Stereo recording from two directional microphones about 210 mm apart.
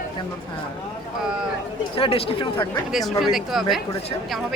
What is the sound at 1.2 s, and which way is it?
Speech, 5° right (ahead or behind).